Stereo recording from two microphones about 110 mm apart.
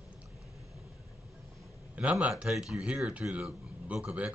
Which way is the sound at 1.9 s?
10° right (ahead or behind).